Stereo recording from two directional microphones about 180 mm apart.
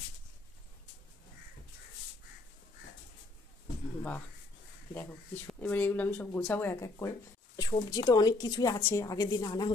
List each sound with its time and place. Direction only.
4.9 s a woman's voice: 5° left (ahead or behind)